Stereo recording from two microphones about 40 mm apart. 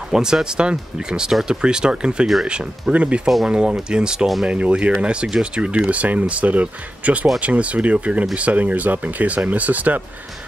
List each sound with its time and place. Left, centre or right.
0.1 s speech: centre; by 3.2 s right
3.4 s speech: right
4.5 s speech: right
5.9 s speech: right